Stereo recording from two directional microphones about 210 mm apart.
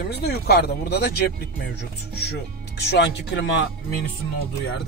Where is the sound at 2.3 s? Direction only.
50° left (ahead or behind).